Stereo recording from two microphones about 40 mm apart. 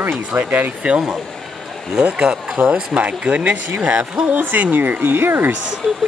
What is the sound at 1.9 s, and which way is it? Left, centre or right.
Speech, right.